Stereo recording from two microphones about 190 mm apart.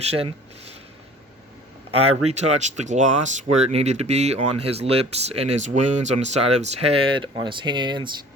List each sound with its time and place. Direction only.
0.1 s speech: 30° right (ahead or behind)
1.9 s speech: 35° right (ahead or behind)